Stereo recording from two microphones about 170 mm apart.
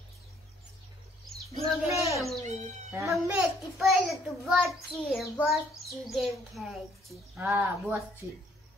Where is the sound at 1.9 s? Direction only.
15° right (ahead or behind).